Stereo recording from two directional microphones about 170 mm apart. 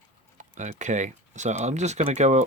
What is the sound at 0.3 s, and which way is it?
Speech, 45° right (ahead or behind).